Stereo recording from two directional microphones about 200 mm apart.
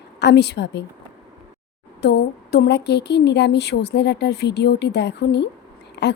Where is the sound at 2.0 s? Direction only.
60° left (ahead or behind).